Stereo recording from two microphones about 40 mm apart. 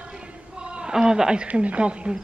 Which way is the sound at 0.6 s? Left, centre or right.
Right.